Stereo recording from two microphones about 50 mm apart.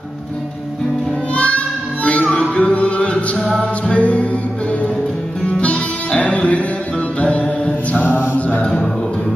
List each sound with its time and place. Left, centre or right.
1.3 s child singing: left
2.0 s music: left
3.3 s music: centre
3.9 s music: left
5.5 s music: left
8.0 s mantra: left